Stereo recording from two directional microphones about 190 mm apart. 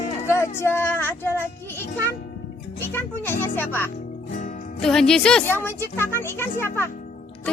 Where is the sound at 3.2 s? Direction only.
10° left (ahead or behind).